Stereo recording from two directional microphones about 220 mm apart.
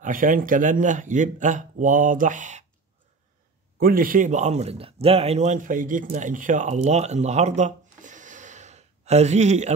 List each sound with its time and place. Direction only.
0.0 s a man's voice: 40° right (ahead or behind)
3.8 s speech: 40° right (ahead or behind)